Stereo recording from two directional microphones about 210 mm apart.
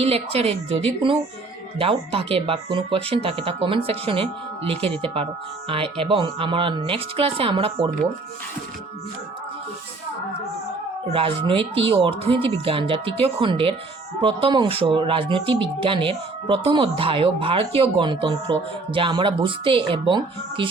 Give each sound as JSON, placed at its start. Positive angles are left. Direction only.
{"t": 0.0, "sound": "speech", "side_deg": -30}
{"t": 1.8, "sound": "speech", "side_deg": -25}
{"t": 11.1, "sound": "speech", "side_deg": -25}